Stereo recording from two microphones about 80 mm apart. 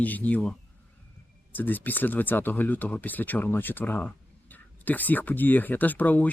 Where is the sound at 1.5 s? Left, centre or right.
Left.